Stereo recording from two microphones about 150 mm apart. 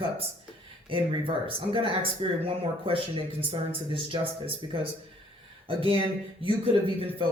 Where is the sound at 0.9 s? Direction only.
35° right (ahead or behind).